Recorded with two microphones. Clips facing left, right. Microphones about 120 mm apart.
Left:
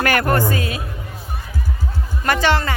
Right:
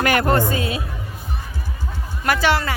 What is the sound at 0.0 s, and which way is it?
Speech, 20° right (ahead or behind).